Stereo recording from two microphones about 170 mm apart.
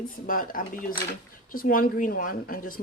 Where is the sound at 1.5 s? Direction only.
55° left (ahead or behind).